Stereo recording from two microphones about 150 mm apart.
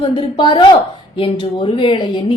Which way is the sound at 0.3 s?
35° left (ahead or behind).